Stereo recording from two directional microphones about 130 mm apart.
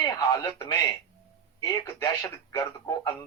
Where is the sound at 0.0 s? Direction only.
25° left (ahead or behind).